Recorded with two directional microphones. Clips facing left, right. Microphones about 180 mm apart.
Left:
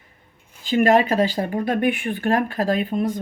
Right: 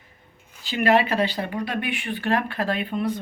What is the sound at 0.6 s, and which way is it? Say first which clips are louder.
Speech: left 4 dB; 45° left (ahead or behind).